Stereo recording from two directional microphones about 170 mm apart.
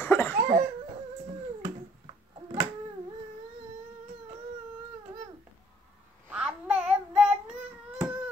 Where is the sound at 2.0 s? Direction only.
30° right (ahead or behind).